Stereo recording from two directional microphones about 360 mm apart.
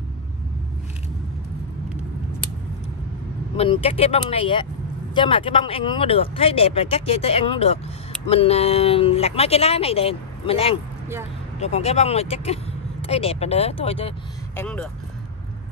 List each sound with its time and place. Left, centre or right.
3.5 s speech: centre